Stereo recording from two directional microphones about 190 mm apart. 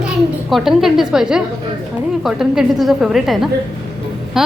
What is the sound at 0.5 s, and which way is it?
A woman's voice, centre (ahead or behind).